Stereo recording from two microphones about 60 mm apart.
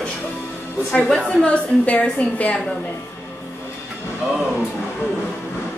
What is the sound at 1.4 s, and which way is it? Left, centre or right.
A woman's voice, left.